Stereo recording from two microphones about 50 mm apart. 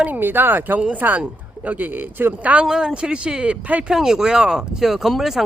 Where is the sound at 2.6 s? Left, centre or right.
Centre.